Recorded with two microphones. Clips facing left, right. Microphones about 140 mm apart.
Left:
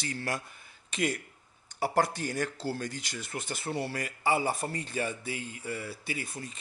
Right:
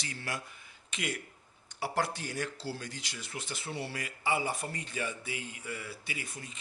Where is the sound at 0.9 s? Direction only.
35° left (ahead or behind).